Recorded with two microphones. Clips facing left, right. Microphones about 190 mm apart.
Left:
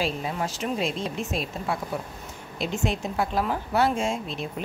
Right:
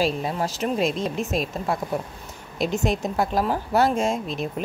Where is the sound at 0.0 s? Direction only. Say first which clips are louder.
Right 4 dB; 40° right (ahead or behind).